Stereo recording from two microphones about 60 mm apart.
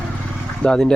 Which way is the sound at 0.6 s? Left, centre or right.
Centre.